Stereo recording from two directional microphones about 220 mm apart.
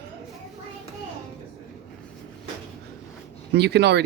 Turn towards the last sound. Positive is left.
turn(degrees=-50)  # may be behind; listen again after turning